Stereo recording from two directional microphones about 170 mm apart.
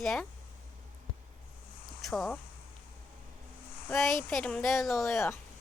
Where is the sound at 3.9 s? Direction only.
Centre (ahead or behind).